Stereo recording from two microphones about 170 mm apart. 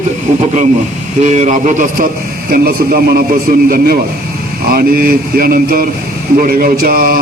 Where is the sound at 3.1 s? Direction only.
60° right (ahead or behind).